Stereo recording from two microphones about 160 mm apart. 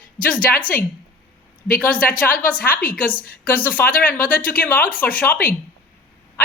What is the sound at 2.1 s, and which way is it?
Speech, 60° left (ahead or behind).